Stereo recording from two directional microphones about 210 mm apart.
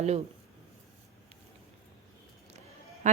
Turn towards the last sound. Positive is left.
turn(degrees=-35)  # may be behind; listen again after turning